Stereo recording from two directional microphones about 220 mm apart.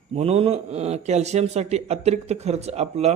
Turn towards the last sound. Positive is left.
turn(degrees=-30)  # may be behind; listen again after turning